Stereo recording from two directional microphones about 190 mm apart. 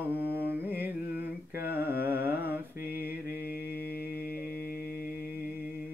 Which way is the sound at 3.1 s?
55° left (ahead or behind).